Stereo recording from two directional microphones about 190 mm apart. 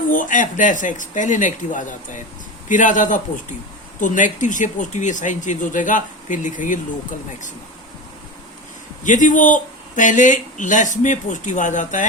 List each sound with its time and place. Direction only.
0.1 s speech: 45° left (ahead or behind)
9.0 s speech: 45° left (ahead or behind)